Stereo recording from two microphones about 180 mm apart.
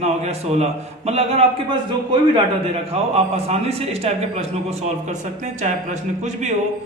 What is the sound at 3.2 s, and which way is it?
A man's voice, 35° right (ahead or behind).